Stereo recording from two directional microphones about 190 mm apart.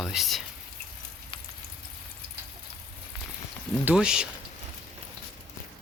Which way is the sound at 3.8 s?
5° right (ahead or behind).